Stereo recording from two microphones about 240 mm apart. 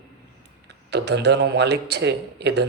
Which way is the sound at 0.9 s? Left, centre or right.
Right.